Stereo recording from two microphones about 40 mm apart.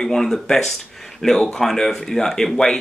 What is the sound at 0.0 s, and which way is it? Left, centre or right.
Speech, centre.